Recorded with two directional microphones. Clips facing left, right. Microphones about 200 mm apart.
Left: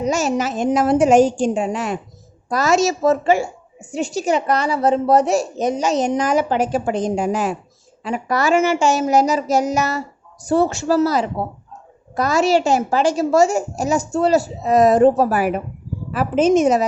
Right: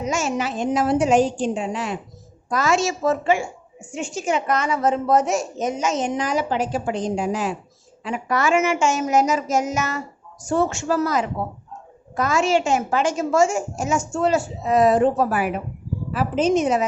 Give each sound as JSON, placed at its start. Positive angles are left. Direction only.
{"t": 0.0, "sound": "a woman's voice", "side_deg": 35}
{"t": 8.0, "sound": "a woman's voice", "side_deg": 40}
{"t": 16.1, "sound": "a woman's voice", "side_deg": 50}